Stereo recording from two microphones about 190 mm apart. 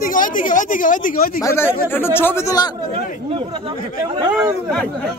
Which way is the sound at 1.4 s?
15° left (ahead or behind).